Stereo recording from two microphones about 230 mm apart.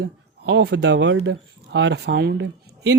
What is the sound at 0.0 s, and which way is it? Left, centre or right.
Speech, right.